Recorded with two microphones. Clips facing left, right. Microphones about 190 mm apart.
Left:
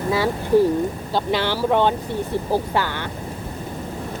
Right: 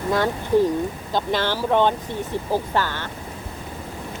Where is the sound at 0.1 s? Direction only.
5° left (ahead or behind).